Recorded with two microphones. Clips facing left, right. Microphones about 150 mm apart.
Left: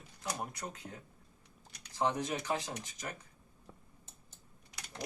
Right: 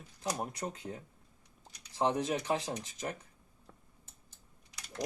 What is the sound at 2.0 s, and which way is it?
Speech, 25° right (ahead or behind).